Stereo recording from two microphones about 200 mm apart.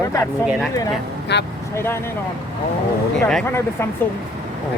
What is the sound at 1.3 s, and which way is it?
Speech, 60° left (ahead or behind).